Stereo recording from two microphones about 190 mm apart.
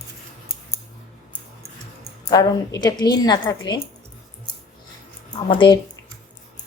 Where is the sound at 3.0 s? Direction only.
20° left (ahead or behind).